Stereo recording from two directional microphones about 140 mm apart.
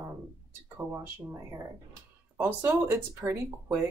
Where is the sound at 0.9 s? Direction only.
20° right (ahead or behind).